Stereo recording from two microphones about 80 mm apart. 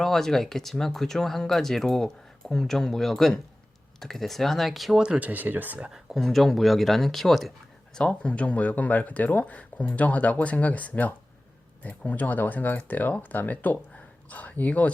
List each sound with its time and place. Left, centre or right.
0.0 s speech: centre
5.0 s speech: centre
5.9 s speech: centre